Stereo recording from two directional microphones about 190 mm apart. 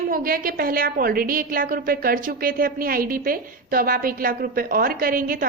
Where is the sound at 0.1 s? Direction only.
50° right (ahead or behind).